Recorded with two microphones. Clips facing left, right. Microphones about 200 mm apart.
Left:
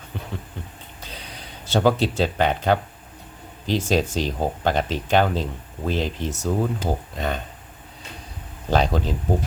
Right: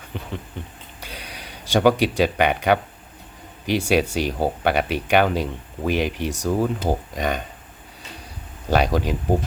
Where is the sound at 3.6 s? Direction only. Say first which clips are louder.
Right 2 dB; 10° right (ahead or behind).